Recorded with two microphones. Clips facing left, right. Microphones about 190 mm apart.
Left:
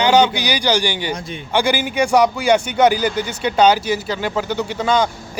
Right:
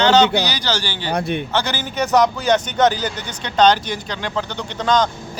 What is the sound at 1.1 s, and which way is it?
Speech, 65° right (ahead or behind).